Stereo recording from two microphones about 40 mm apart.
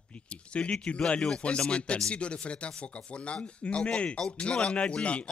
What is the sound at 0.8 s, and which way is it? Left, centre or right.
A man's voice, left.